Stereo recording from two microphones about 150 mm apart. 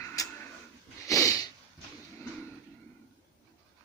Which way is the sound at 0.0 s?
20° left (ahead or behind).